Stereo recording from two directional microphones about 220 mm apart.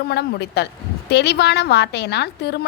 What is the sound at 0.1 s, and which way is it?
A woman's voice, 50° left (ahead or behind).